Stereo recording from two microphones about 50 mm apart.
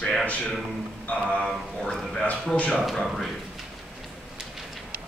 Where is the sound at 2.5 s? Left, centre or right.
Left.